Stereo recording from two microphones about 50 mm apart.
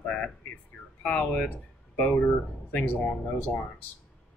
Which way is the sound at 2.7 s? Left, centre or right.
Left.